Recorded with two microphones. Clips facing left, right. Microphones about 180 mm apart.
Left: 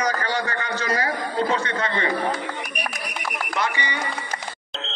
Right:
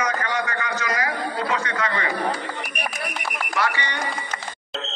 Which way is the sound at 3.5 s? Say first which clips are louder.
Right 1 dB; 20° left (ahead or behind).